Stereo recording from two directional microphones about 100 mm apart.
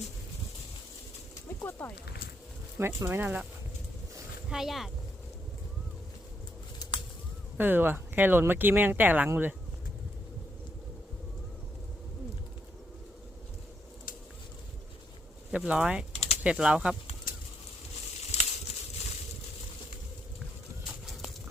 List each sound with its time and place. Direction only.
1.5 s a sound: 25° left (ahead or behind)
2.7 s speech: 25° right (ahead or behind)
4.4 s speech: 5° right (ahead or behind)
7.5 s speech: 20° right (ahead or behind)
15.5 s speech: 10° right (ahead or behind)
18.3 s a sound: 90° left